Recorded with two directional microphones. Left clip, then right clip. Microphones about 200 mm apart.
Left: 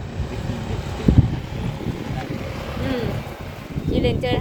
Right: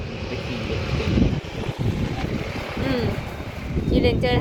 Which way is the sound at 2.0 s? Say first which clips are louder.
Right 1 dB; 60° left (ahead or behind).